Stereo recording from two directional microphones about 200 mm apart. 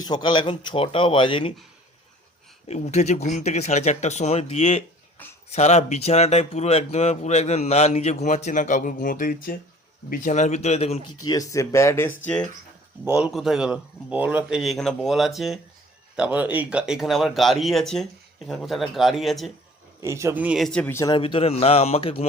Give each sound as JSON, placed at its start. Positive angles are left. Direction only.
{"t": 0.0, "sound": "speech", "side_deg": 20}
{"t": 2.6, "sound": "speech", "side_deg": 35}
{"t": 5.2, "sound": "a sound", "side_deg": 10}
{"t": 5.5, "sound": "speech", "side_deg": 35}
{"t": 11.3, "sound": "speech", "side_deg": 15}
{"t": 20.0, "sound": "speech", "side_deg": -15}
{"t": 21.2, "sound": "speech", "side_deg": 30}